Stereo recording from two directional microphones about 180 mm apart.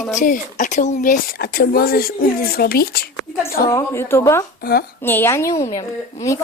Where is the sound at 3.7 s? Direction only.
15° left (ahead or behind).